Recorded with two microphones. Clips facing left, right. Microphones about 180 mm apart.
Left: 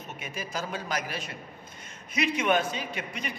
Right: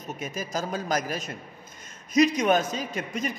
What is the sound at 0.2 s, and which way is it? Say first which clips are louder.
A man's voice: right 4 dB; 40° right (ahead or behind).